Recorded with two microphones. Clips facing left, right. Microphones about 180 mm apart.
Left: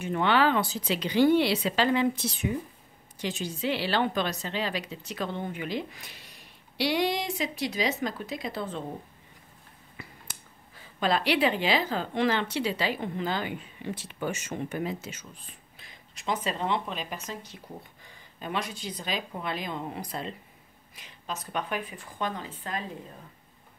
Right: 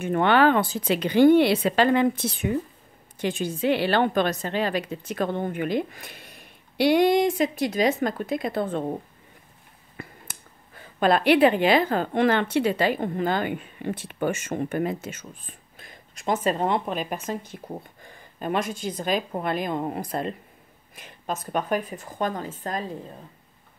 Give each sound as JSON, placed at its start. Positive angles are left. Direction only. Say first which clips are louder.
{"t": 0.0, "sound": "a woman's voice", "louder": "right 5 dB", "side_deg": -50}
{"t": 9.9, "sound": "a woman's voice", "louder": "right 5 dB", "side_deg": -55}